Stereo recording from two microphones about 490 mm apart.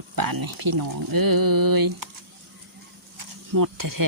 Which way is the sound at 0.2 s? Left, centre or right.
Right.